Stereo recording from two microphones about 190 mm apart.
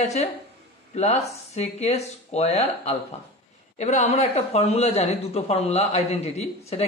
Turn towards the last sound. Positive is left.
turn(degrees=35)  # may be behind; listen again after turning